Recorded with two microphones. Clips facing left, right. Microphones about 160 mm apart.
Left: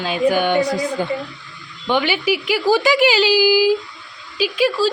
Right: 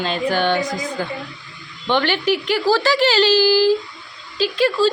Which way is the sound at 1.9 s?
10° left (ahead or behind).